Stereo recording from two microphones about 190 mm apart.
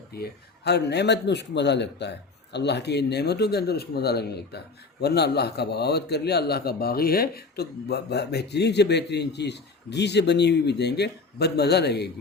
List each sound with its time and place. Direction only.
0.2 s speech: 60° left (ahead or behind)